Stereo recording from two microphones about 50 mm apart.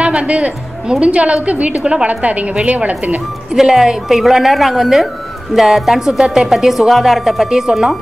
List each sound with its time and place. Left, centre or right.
0.0 s a woman's voice: right
3.5 s a woman's voice: centre